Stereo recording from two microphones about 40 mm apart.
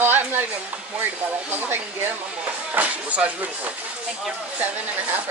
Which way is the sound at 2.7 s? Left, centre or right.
Right.